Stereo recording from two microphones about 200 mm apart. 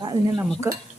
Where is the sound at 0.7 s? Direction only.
10° right (ahead or behind).